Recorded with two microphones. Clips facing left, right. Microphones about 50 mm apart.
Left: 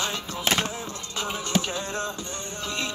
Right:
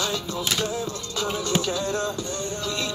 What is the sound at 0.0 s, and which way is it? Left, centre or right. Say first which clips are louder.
Music: right 1 dB; left.